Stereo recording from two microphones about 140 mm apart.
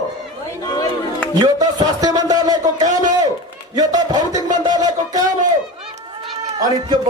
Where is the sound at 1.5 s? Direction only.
25° right (ahead or behind).